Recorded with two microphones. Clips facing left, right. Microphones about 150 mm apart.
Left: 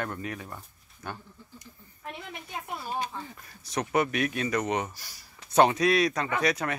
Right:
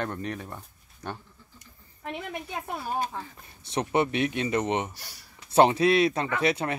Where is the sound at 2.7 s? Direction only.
40° right (ahead or behind).